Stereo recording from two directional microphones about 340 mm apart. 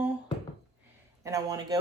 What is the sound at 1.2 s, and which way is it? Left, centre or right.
Speech, centre.